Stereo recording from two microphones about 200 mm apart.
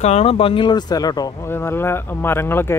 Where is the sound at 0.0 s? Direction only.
30° left (ahead or behind).